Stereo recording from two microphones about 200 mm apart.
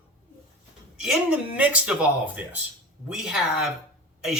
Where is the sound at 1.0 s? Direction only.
5° right (ahead or behind).